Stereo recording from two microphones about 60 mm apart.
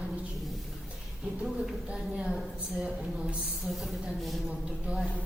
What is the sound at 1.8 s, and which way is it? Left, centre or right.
Speech, centre.